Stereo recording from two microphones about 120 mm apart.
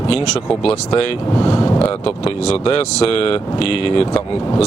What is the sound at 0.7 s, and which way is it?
Speech, 35° left (ahead or behind).